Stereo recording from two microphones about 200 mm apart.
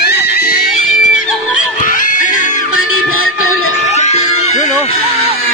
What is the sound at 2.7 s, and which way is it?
Music, 90° left.